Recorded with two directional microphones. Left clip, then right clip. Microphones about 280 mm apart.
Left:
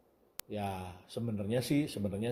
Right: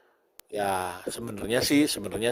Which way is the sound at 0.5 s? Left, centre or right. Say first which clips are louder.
Right 12 dB; right.